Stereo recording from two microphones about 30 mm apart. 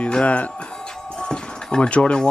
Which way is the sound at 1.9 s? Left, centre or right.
Left.